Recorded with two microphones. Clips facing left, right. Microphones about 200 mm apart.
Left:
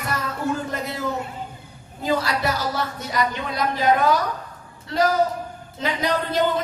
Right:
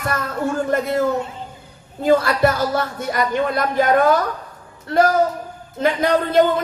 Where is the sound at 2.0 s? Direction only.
50° right (ahead or behind).